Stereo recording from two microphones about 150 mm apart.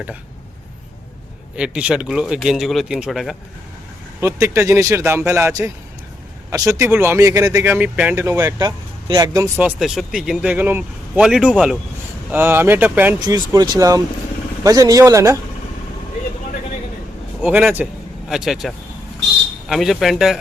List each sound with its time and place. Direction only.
1.5 s speech: 5° right (ahead or behind)
4.2 s a man's voice: 20° right (ahead or behind)
8.6 s speech: 25° right (ahead or behind)
9.6 s speech: 5° right (ahead or behind)
11.2 s speech: 5° right (ahead or behind)
12.3 s speech: 15° right (ahead or behind)
13.2 s a man's voice: 25° right (ahead or behind)
17.4 s speech: 10° right (ahead or behind)